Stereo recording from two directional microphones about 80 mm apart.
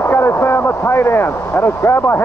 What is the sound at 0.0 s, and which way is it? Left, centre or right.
Speech, left.